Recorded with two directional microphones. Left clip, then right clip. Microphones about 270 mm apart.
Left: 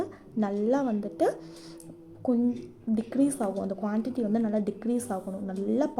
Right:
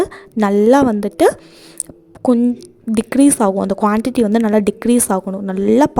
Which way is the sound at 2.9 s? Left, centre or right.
Right.